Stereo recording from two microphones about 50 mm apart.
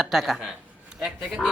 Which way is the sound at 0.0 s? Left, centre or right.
Centre.